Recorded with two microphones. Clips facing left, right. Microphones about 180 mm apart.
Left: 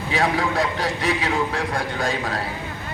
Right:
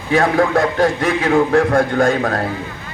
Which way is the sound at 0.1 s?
50° right (ahead or behind).